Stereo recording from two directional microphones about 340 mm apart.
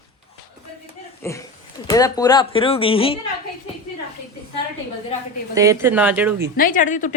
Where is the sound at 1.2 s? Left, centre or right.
Centre.